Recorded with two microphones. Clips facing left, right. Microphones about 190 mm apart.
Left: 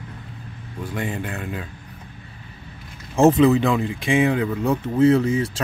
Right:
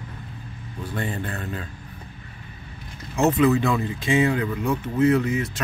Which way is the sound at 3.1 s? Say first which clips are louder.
Left 4 dB; 30° left (ahead or behind).